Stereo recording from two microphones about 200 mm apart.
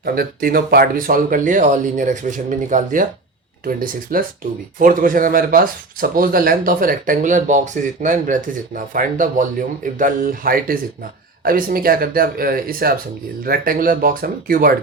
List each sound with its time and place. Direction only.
0.0 s speech: 50° right (ahead or behind)